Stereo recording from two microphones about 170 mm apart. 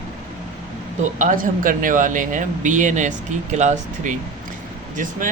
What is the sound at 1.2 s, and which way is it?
Speech, 50° right (ahead or behind).